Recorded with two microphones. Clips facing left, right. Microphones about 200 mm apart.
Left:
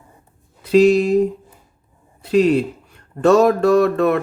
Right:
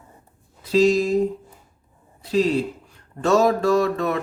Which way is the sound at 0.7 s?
60° left (ahead or behind).